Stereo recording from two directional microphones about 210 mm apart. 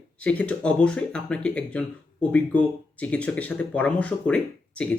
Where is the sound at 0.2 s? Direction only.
5° left (ahead or behind).